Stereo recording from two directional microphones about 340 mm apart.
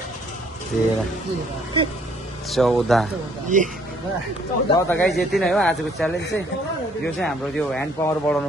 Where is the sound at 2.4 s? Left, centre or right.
Centre.